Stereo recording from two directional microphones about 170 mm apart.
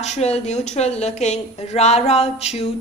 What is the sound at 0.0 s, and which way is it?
Speech, 40° left (ahead or behind).